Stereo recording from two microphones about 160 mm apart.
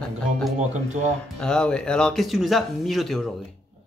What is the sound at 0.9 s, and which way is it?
Speech, 45° right (ahead or behind).